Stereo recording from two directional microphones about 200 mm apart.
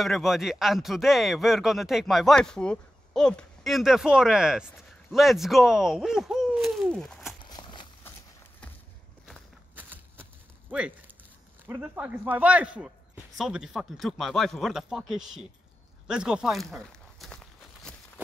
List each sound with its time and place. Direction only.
0.0 s speech: centre (ahead or behind)
7.4 s a sound: 20° left (ahead or behind)
9.3 s walk: 10° right (ahead or behind)
11.6 s speech: 10° right (ahead or behind)